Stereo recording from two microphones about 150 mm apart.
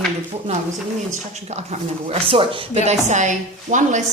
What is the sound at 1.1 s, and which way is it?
A woman's voice, 50° right (ahead or behind).